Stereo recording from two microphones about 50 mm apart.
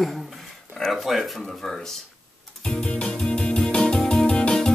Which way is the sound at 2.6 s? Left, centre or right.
Left.